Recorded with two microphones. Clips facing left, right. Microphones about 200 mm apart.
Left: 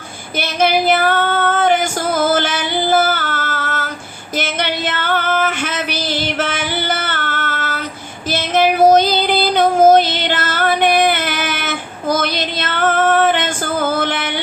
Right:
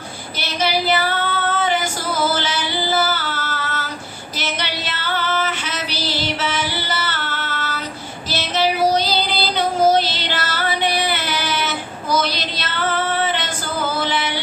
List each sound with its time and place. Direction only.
0.3 s female singing: 50° left (ahead or behind)
4.4 s a sound: 50° left (ahead or behind)
8.3 s child singing: 50° left (ahead or behind)